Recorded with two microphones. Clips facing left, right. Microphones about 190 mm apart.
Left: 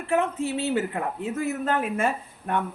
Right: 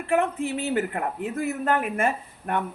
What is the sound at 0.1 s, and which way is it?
Speech, 55° right (ahead or behind).